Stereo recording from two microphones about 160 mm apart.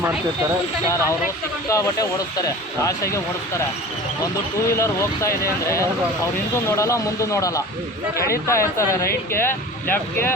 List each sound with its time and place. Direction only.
1.7 s speech: 20° left (ahead or behind)
4.7 s speech: 15° left (ahead or behind)